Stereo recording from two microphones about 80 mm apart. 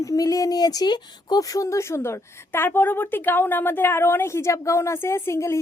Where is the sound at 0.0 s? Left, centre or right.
Left.